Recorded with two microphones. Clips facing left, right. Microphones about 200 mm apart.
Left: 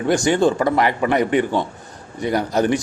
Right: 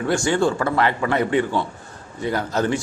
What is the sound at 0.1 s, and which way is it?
A man's voice, 20° left (ahead or behind).